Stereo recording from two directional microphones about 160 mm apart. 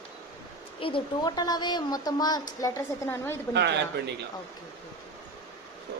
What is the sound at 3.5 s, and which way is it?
Speech, 90° right.